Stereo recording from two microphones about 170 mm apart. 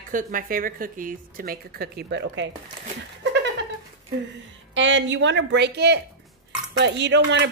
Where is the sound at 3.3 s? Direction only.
90° right.